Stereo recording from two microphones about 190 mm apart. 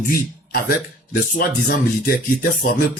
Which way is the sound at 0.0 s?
50° left (ahead or behind).